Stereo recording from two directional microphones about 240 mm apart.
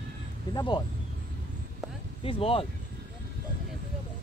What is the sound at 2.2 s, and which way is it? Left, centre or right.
Speech, left.